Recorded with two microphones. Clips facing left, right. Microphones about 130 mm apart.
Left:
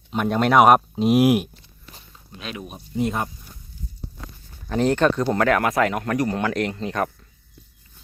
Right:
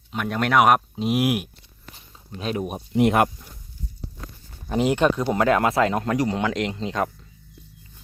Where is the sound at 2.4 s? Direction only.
40° right (ahead or behind).